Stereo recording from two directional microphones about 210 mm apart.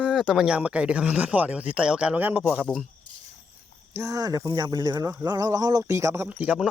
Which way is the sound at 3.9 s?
10° right (ahead or behind).